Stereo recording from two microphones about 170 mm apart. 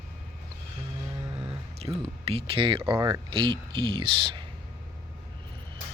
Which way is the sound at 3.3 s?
30° right (ahead or behind).